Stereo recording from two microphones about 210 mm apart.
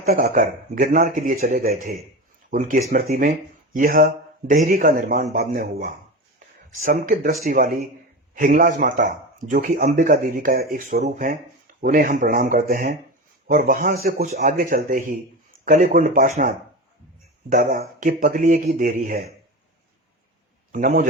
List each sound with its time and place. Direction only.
0.0 s speech: 45° right (ahead or behind)
17.5 s speech: 40° right (ahead or behind)
20.7 s speech: 40° right (ahead or behind)